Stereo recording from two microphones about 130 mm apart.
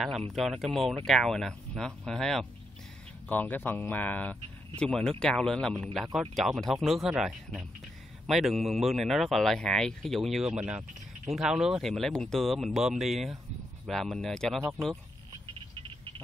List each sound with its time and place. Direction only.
0.3 s speech: centre (ahead or behind)
3.3 s speech: 15° left (ahead or behind); by 11.9 s 5° right (ahead or behind)
11.9 s speech: 5° left (ahead or behind)
15.7 s a sound: 45° right (ahead or behind)